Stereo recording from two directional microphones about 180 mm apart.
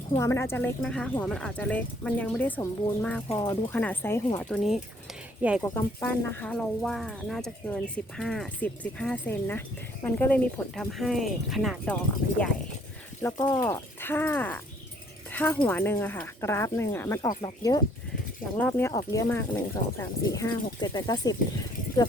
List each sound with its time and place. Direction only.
0.2 s speech: 15° left (ahead or behind)
5.4 s speech: 5° right (ahead or behind)
5.6 s speech: 10° left (ahead or behind)
13.2 s speech: 20° left (ahead or behind)
15.3 s a sound: 10° left (ahead or behind)
15.6 s speech: 10° left (ahead or behind)